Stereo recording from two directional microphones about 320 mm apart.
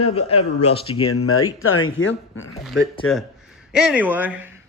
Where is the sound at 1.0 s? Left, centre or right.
Left.